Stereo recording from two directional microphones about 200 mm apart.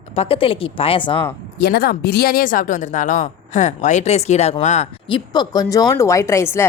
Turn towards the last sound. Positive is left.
turn(degrees=15)  # may be behind; listen again after turning